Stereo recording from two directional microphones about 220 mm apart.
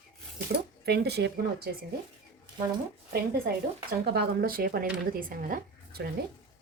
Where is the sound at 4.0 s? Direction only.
45° right (ahead or behind).